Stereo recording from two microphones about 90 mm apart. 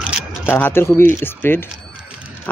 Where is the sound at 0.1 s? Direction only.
10° right (ahead or behind).